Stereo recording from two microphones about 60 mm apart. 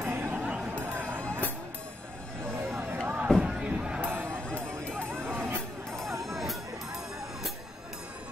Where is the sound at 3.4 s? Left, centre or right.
Centre.